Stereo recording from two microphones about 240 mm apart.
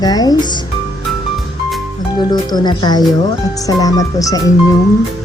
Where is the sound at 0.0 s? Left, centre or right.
Centre.